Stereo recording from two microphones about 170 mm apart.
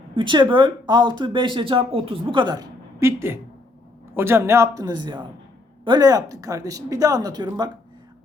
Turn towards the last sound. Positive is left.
turn(degrees=-25)  # may be behind; listen again after turning